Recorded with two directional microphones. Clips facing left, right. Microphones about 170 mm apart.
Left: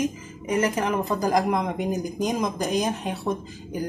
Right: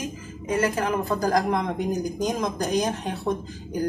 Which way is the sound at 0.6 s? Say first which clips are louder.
Even; 15° left (ahead or behind).